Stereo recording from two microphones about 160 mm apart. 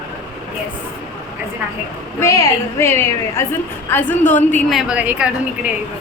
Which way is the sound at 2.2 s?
15° left (ahead or behind).